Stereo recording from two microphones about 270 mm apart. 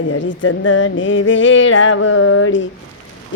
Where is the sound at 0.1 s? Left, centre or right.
Left.